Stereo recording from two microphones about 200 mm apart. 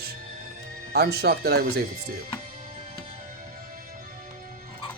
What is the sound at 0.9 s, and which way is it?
Speech, 55° right (ahead or behind).